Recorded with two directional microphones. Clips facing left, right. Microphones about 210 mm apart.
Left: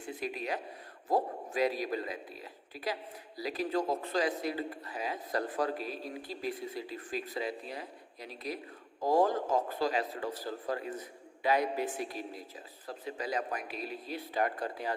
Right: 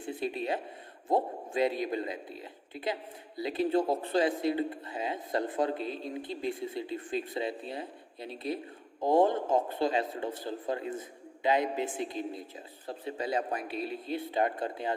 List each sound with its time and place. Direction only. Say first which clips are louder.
0.0 s a man's voice: right 4 dB; 30° right (ahead or behind)